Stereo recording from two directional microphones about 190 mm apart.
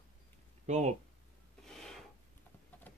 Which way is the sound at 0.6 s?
40° right (ahead or behind).